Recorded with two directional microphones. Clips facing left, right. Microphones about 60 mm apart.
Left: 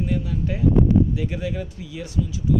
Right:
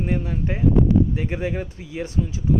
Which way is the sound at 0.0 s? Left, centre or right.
Right.